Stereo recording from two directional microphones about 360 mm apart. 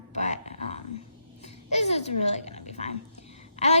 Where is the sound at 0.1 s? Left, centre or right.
Centre.